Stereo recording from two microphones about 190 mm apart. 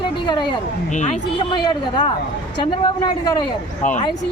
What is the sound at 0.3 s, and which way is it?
Speech, 25° left (ahead or behind).